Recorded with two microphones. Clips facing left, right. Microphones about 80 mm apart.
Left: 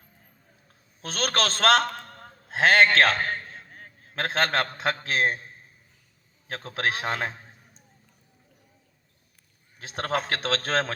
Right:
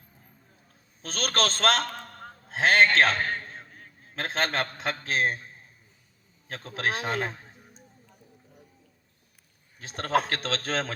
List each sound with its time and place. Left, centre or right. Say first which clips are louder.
1.0 s a man's voice: left 1 dB; left
3.7 s a sound: left 2 dB; left
4.4 s a man's voice: left 3 dB; left
6.7 s a man's voice: left 1 dB; left
9.8 s a man's voice: right 2 dB; left